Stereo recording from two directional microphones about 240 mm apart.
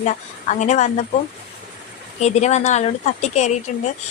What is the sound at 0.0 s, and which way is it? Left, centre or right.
Speech, left.